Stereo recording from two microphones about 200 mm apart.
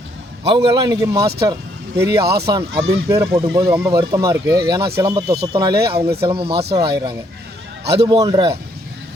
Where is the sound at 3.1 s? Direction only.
15° right (ahead or behind).